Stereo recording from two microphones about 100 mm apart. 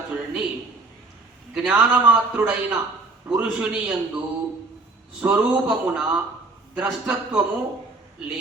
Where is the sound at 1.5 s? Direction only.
10° right (ahead or behind).